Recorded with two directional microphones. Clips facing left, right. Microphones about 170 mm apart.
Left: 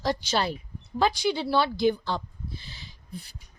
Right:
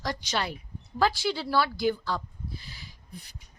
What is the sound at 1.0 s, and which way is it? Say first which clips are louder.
Speech: left 2 dB; 20° left (ahead or behind).